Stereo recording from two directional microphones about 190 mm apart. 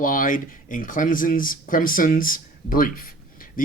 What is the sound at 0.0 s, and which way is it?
Speech, 45° left (ahead or behind).